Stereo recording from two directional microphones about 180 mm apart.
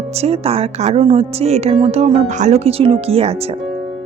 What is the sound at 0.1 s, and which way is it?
Speech, 35° right (ahead or behind).